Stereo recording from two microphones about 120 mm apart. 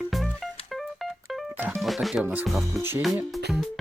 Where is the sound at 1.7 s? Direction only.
Centre (ahead or behind).